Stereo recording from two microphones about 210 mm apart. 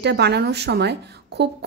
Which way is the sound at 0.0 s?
50° right (ahead or behind).